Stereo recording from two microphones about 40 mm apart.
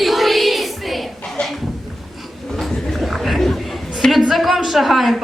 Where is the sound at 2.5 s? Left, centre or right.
Centre.